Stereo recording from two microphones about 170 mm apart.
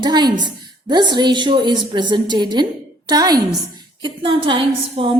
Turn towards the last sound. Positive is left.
turn(degrees=-30)  # may be behind; listen again after turning